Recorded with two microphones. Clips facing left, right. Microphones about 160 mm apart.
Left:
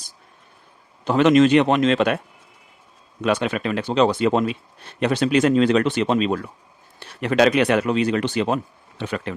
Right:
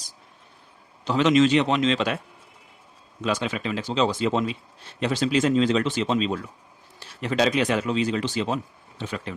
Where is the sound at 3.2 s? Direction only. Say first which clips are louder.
Left 5 dB; 60° left (ahead or behind).